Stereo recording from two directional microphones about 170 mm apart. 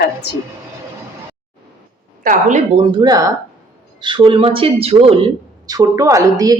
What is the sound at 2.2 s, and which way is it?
Speech, 45° right (ahead or behind).